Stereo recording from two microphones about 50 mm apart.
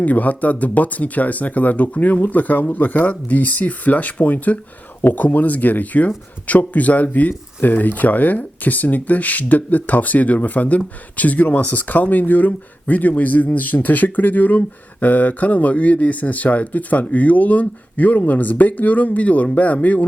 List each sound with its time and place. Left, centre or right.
0.0 s speech: left